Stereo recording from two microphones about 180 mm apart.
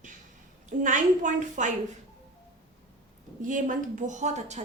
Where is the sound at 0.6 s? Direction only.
45° right (ahead or behind).